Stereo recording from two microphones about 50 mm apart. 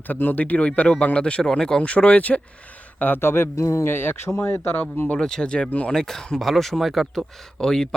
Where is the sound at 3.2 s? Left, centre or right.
Left.